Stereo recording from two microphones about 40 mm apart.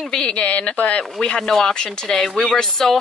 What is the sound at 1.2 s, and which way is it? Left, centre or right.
Speech, centre.